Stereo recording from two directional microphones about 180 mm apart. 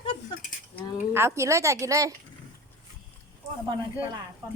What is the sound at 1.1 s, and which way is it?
A woman's voice, 15° right (ahead or behind).